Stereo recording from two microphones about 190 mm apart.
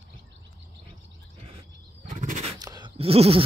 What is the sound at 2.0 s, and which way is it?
Bird, 40° right (ahead or behind).